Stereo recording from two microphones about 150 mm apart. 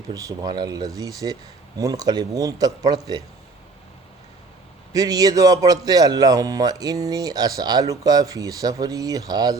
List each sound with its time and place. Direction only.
0.1 s speech: 25° right (ahead or behind)
4.9 s speech: 25° right (ahead or behind)